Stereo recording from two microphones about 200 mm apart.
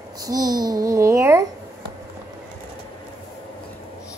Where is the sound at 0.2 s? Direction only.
20° right (ahead or behind).